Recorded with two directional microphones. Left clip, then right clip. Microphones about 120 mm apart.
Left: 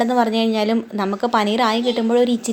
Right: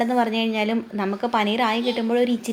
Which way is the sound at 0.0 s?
25° left (ahead or behind).